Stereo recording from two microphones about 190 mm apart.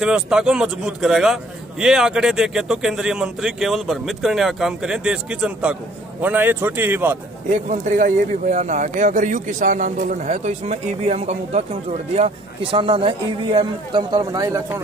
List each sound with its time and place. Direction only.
0.0 s a man's voice: 5° right (ahead or behind)
7.7 s a man's voice: 45° right (ahead or behind)
12.7 s speech: 25° right (ahead or behind)